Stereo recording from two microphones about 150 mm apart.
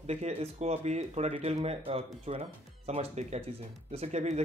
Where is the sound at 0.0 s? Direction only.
45° right (ahead or behind).